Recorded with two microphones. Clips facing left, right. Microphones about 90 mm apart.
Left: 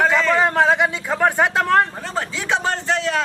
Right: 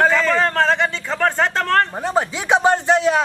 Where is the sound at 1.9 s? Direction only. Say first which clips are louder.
Right 6 dB; 20° right (ahead or behind).